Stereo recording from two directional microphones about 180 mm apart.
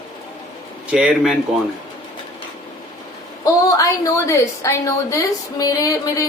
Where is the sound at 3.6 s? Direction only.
20° left (ahead or behind).